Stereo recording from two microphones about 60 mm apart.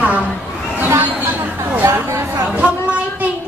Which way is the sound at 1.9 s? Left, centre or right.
Right.